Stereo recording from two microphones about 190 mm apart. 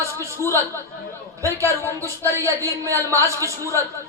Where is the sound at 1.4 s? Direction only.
15° right (ahead or behind).